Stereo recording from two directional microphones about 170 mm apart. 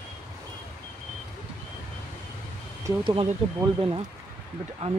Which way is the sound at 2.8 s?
25° right (ahead or behind).